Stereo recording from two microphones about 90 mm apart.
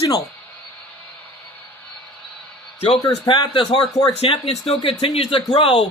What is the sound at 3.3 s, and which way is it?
Speech, 55° left (ahead or behind).